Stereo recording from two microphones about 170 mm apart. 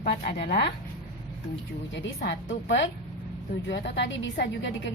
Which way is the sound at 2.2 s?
90° left.